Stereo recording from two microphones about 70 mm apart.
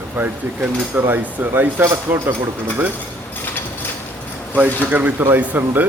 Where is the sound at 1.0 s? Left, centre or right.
Right.